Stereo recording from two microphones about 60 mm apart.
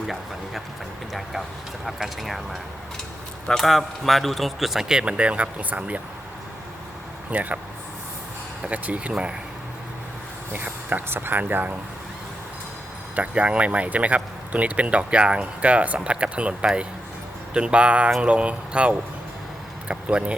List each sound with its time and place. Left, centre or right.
1.1 s a man's voice: centre; by 6.0 s right
7.3 s speech: right
8.6 s speech: right
10.5 s speech: right
13.1 s speech: right